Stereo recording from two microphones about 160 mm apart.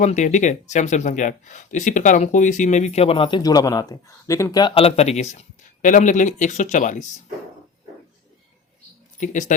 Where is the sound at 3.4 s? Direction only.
20° left (ahead or behind); by 7.0 s 50° left (ahead or behind).